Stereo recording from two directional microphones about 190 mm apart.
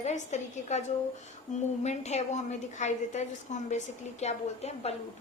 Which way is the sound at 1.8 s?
35° left (ahead or behind).